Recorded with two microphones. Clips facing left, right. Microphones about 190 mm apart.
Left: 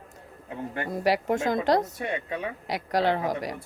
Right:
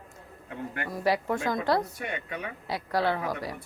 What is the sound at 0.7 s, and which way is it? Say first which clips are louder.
Speech: left 2 dB; 25° left (ahead or behind).